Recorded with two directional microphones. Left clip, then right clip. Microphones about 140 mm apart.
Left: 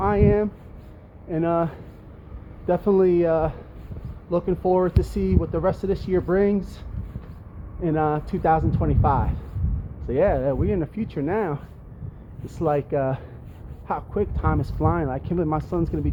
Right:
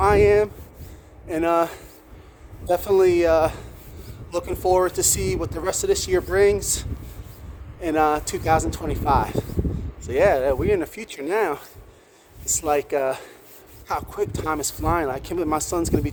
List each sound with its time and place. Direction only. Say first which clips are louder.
0.0 s speech: right 4 dB; 35° right (ahead or behind)